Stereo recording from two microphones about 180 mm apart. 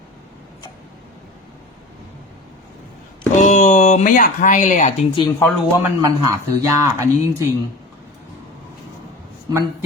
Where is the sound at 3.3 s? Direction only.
40° left (ahead or behind).